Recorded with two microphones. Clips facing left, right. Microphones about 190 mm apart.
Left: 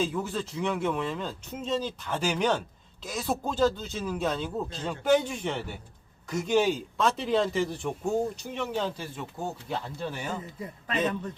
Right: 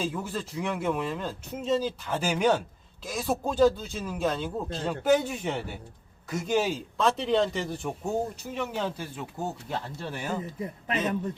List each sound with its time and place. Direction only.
0.0 s speech: 5° right (ahead or behind)
10.6 s a man's voice: 20° right (ahead or behind)